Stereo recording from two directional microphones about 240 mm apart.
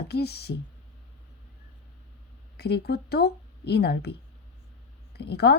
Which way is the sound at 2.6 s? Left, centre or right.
Left.